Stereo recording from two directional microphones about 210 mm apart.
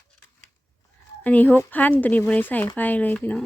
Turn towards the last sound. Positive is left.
turn(degrees=10)  # may be behind; listen again after turning